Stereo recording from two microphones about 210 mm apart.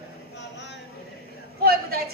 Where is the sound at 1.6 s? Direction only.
45° right (ahead or behind).